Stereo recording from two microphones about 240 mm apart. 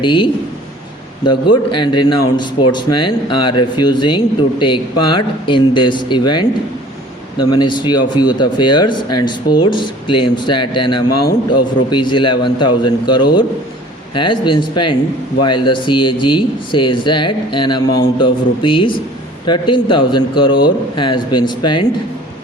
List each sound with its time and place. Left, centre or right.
0.0 s speech: centre
11.1 s a man's voice: left
11.9 s speech: centre